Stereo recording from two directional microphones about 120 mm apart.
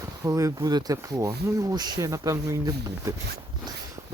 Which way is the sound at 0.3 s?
25° right (ahead or behind).